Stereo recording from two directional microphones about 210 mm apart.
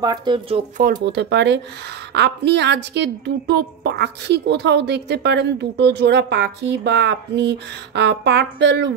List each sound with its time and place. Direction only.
0.0 s speech: 20° right (ahead or behind)
0.7 s a woman's voice: 50° right (ahead or behind)